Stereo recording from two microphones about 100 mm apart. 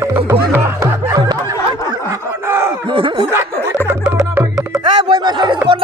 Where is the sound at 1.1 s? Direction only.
40° right (ahead or behind).